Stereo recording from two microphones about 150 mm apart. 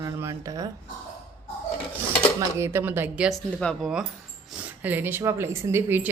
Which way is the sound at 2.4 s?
20° right (ahead or behind).